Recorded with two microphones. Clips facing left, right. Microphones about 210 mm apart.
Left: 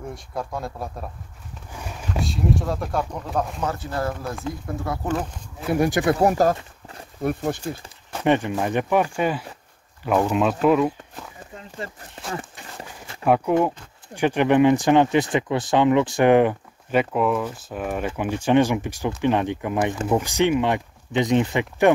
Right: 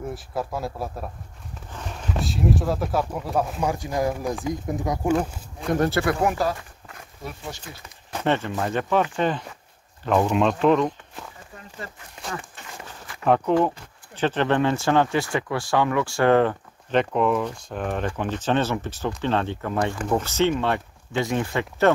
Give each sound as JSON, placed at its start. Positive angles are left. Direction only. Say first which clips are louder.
{"t": 0.1, "sound": "speech", "louder": "right 1 dB", "side_deg": -5}
{"t": 1.7, "sound": "speech", "louder": "even", "side_deg": 10}
{"t": 5.6, "sound": "speech", "louder": "left 1 dB", "side_deg": 10}
{"t": 6.2, "sound": "a sound", "louder": "left 5 dB", "side_deg": 40}
{"t": 7.2, "sound": "speech", "louder": "left 12 dB", "side_deg": 55}
{"t": 8.2, "sound": "speech", "louder": "left 3 dB", "side_deg": 15}
{"t": 13.2, "sound": "speech", "louder": "left 1 dB", "side_deg": 10}